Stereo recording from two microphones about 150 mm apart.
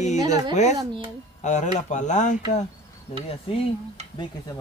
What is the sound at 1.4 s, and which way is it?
Speech, 50° left (ahead or behind).